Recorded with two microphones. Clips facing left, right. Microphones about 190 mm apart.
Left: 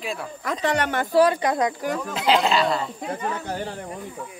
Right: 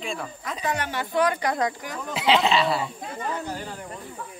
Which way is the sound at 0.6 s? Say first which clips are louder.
Left 5 dB; 70° left (ahead or behind).